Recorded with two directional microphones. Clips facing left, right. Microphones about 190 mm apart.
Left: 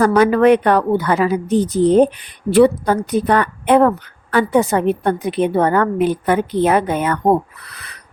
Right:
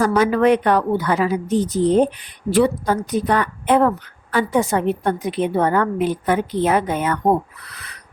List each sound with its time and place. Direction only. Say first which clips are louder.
0.0 s a woman's voice: left 4 dB; 60° left (ahead or behind)